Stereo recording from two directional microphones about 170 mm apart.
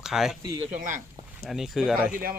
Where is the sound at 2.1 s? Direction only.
60° right (ahead or behind).